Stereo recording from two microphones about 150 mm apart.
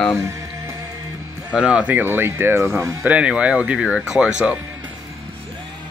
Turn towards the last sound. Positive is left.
turn(degrees=-5)  # may be behind; listen again after turning